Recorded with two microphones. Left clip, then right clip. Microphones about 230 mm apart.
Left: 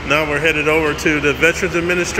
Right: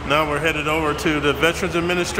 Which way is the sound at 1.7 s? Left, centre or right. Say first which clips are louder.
Left 4 dB; right.